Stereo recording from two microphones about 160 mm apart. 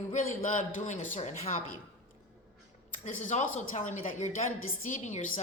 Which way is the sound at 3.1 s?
50° left (ahead or behind).